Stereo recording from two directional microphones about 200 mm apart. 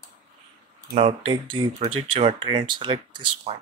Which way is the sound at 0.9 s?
30° right (ahead or behind).